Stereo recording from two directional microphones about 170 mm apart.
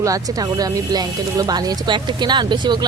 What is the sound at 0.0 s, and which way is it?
Speech, 20° right (ahead or behind).